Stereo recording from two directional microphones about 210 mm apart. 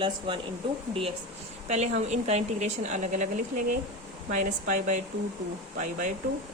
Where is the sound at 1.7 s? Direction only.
35° right (ahead or behind).